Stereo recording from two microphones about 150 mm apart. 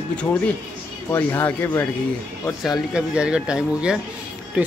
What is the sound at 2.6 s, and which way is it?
Speech, 5° right (ahead or behind).